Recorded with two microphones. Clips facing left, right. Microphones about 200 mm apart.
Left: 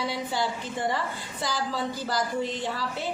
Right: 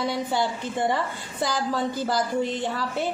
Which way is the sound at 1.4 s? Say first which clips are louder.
Right 4 dB; 50° right (ahead or behind).